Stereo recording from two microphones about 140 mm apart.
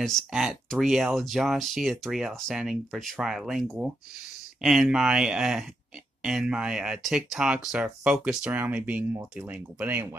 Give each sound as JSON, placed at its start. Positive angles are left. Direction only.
{"t": 0.0, "sound": "speech", "side_deg": 0}